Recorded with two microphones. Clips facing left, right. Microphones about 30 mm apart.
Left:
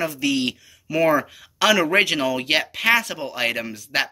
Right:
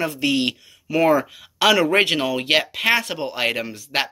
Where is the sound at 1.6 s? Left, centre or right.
Right.